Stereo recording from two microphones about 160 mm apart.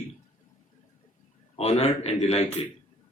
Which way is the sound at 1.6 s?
40° left (ahead or behind).